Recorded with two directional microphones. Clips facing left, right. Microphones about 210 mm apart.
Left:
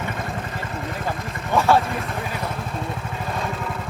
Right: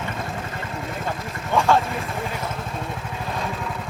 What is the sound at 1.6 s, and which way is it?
Vehicle, 5° left (ahead or behind).